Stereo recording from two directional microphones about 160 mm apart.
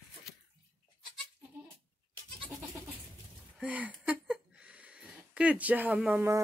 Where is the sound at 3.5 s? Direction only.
10° right (ahead or behind).